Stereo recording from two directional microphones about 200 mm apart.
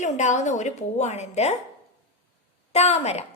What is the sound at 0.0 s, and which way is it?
A woman's voice, 35° left (ahead or behind).